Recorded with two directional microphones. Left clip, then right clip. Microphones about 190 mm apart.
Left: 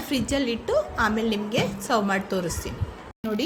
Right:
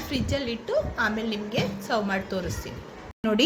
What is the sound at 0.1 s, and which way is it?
A woman's voice, 65° left (ahead or behind).